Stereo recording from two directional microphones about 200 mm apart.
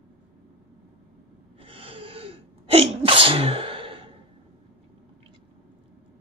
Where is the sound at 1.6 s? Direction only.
25° right (ahead or behind).